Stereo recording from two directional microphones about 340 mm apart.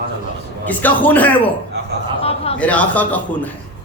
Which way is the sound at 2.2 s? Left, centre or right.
Centre.